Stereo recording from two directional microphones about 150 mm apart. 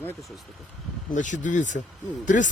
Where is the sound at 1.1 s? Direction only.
55° left (ahead or behind).